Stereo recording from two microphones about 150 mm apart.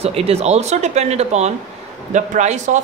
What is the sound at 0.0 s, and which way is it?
Speech, 40° right (ahead or behind).